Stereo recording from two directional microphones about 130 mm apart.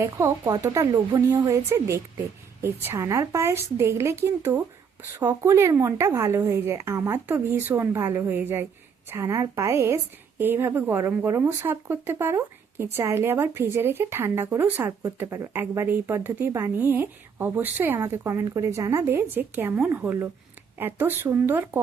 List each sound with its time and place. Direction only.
0.0 s a woman's voice: 25° right (ahead or behind)